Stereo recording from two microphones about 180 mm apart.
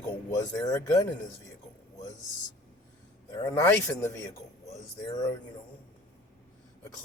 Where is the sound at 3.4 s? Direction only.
20° left (ahead or behind).